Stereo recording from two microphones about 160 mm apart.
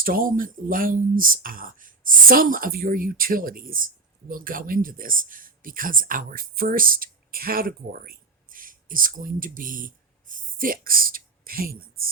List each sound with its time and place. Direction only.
0.0 s speech: 65° right (ahead or behind)